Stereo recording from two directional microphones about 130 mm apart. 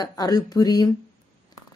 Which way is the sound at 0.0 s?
30° left (ahead or behind).